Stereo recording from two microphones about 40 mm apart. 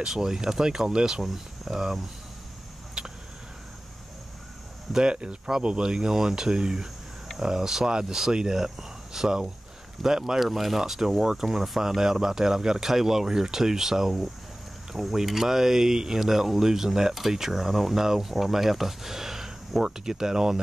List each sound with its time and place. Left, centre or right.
0.0 s speech: centre
1.2 s speech: centre
3.0 s a sound: centre
4.9 s speech: right